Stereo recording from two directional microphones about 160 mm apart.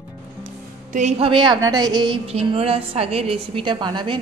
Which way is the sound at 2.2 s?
40° right (ahead or behind).